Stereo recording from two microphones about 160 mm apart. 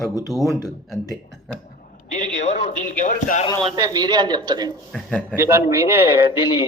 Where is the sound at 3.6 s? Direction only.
30° right (ahead or behind).